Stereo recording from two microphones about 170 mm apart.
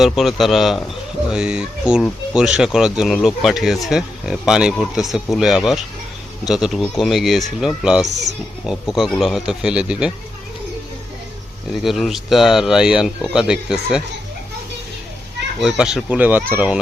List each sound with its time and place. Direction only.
0.0 s speech: centre (ahead or behind)
8.0 s speech: 40° right (ahead or behind)
8.6 s speech: centre (ahead or behind)
11.7 s speech: centre (ahead or behind)
15.6 s speech: centre (ahead or behind)